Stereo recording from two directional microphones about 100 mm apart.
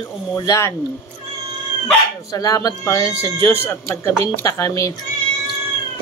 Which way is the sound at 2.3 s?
35° left (ahead or behind).